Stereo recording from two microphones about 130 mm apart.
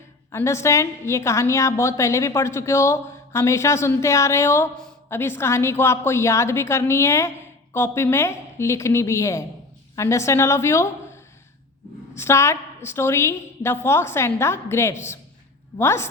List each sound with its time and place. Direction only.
0.3 s a woman's voice: 20° left (ahead or behind)